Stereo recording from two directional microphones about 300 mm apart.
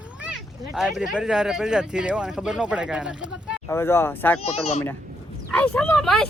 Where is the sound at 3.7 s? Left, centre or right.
Centre.